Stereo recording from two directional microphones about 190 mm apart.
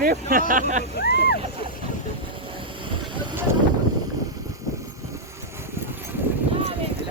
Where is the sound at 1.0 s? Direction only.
60° left (ahead or behind).